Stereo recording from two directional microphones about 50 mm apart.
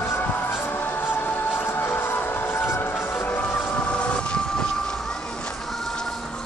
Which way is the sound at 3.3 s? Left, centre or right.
Left.